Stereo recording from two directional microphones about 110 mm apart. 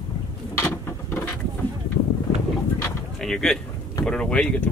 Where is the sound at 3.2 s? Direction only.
5° left (ahead or behind).